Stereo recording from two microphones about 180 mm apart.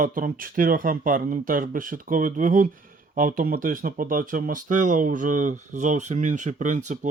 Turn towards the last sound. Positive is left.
turn(degrees=-45)  # may be behind; listen again after turning